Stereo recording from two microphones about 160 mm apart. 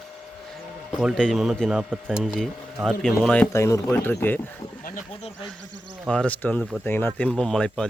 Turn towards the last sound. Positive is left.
turn(degrees=5)  # may be behind; listen again after turning